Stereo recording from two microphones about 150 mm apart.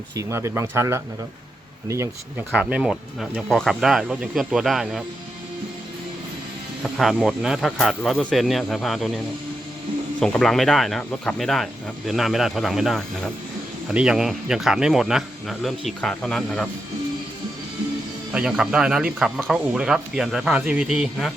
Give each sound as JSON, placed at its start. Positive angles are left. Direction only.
{"t": 0.2, "sound": "speech", "side_deg": -20}
{"t": 2.5, "sound": "speech", "side_deg": -5}
{"t": 6.8, "sound": "speech", "side_deg": 0}
{"t": 18.3, "sound": "speech", "side_deg": -5}